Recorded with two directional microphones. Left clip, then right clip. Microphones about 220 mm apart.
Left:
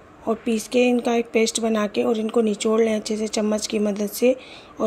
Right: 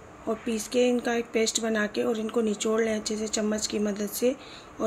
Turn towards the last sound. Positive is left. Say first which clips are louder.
# left 6 dB
turn(degrees=25)  # may be behind; listen again after turning